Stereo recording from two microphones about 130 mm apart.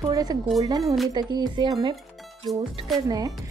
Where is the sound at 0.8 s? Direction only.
Centre (ahead or behind).